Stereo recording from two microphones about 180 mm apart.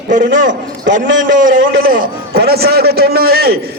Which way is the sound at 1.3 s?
50° right (ahead or behind).